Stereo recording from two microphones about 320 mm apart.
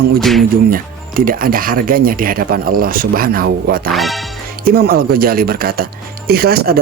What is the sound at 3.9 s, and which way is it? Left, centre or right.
Speech, centre.